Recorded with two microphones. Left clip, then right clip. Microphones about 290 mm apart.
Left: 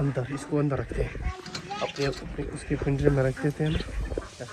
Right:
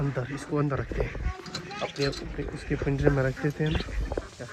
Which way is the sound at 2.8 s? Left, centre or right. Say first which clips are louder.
Left 1 dB; centre.